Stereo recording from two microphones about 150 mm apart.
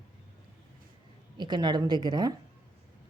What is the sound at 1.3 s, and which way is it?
Speech, 30° right (ahead or behind).